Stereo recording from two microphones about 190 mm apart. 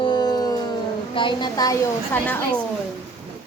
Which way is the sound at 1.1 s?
25° left (ahead or behind).